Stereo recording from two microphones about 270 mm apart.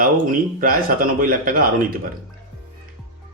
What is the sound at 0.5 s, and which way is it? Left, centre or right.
Speech, right.